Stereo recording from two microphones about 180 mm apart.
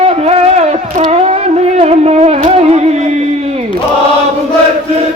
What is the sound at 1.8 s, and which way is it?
Music, 35° right (ahead or behind).